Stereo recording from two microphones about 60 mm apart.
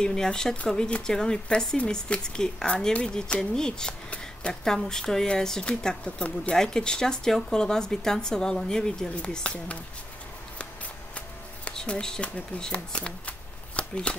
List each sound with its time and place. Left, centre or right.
0.0 s speech: centre
11.7 s speech: centre
13.7 s a sound: centre